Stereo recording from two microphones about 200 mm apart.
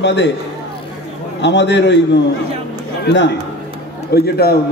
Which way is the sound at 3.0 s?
60° left (ahead or behind).